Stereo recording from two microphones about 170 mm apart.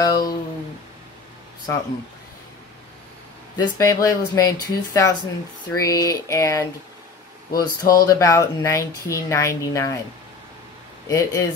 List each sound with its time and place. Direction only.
0.0 s speech: 20° left (ahead or behind)
3.5 s speech: 20° left (ahead or behind)
11.1 s speech: 20° left (ahead or behind)